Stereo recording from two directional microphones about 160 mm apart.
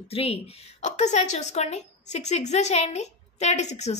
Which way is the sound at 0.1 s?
40° left (ahead or behind).